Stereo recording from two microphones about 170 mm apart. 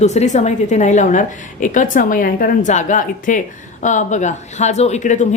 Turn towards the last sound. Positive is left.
turn(degrees=45)  # may be behind; listen again after turning